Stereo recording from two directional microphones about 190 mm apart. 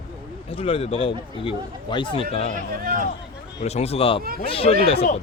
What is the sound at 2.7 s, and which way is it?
Speech, 50° right (ahead or behind).